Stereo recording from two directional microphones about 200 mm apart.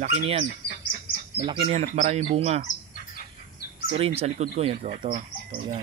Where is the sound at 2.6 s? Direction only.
40° left (ahead or behind).